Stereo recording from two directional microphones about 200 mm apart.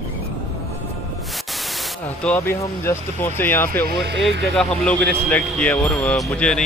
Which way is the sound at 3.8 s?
55° right (ahead or behind).